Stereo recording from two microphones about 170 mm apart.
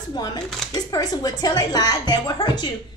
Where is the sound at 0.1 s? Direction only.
25° left (ahead or behind).